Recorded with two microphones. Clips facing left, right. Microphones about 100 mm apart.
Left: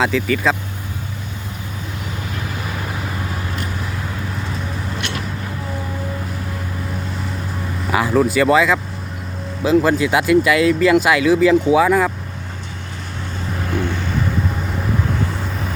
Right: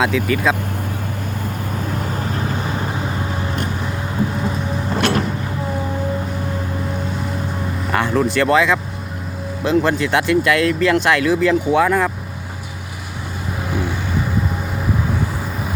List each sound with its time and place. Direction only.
0.0 s speech: centre (ahead or behind)
2.2 s vehicle: 35° right (ahead or behind)
4.9 s vehicle: 45° right (ahead or behind)
7.9 s speech: centre (ahead or behind)
13.7 s vehicle: 10° right (ahead or behind)